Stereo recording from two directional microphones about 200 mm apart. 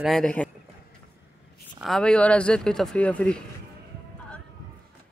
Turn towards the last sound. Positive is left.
turn(degrees=5)  # may be behind; listen again after turning